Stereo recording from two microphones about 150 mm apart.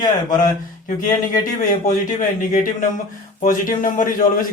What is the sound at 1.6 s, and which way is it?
Speech, 60° left (ahead or behind).